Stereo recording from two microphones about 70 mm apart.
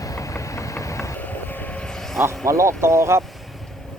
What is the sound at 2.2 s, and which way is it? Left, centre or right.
Speech, right.